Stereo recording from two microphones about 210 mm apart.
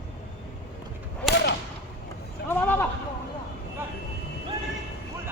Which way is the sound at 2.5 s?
10° left (ahead or behind).